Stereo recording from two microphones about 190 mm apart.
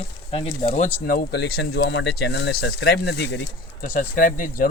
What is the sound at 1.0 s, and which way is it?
Speech, 55° left (ahead or behind).